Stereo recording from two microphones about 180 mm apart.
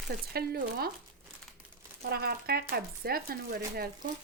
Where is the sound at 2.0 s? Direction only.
60° right (ahead or behind).